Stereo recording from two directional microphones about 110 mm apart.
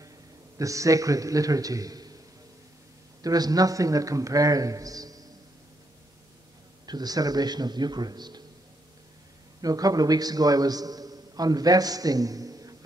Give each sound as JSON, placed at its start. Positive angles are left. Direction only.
{"t": 0.6, "sound": "a man's voice", "side_deg": -30}
{"t": 3.2, "sound": "a man's voice", "side_deg": -35}
{"t": 6.9, "sound": "a man's voice", "side_deg": -35}
{"t": 9.6, "sound": "a man's voice", "side_deg": -35}